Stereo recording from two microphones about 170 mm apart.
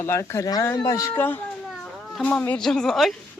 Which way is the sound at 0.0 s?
15° left (ahead or behind).